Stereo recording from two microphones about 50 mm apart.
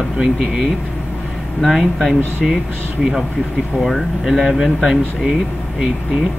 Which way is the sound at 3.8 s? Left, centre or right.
Centre.